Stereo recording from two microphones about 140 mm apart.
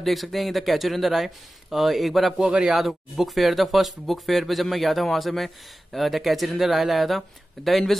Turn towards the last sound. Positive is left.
turn(degrees=0)  # may be behind; listen again after turning